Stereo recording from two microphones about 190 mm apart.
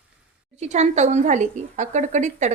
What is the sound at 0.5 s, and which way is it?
A woman's voice, 35° right (ahead or behind).